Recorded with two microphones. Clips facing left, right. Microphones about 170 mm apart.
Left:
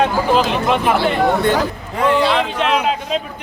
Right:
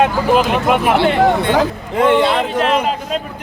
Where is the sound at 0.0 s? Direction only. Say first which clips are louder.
Right 2 dB; 5° right (ahead or behind).